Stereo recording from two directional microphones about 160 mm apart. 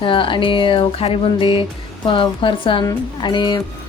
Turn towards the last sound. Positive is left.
turn(degrees=30)  # may be behind; listen again after turning